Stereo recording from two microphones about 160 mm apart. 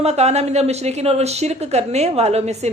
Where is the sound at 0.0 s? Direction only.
45° right (ahead or behind).